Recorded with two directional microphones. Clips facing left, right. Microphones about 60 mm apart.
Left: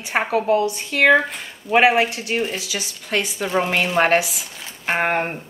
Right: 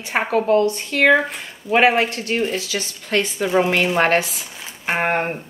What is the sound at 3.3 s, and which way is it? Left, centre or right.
Speech, centre.